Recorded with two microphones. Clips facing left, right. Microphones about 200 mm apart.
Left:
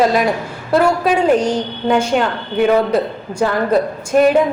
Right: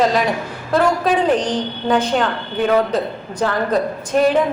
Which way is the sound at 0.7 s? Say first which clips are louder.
Left 2 dB; 10° left (ahead or behind).